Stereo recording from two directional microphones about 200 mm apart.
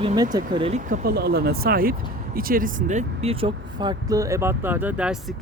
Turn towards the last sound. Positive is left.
turn(degrees=-5)  # may be behind; listen again after turning